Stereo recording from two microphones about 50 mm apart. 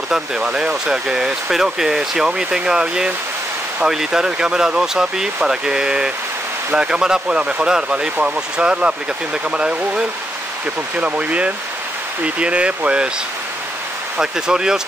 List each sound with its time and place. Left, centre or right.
0.4 s speech: centre
14.2 s speech: centre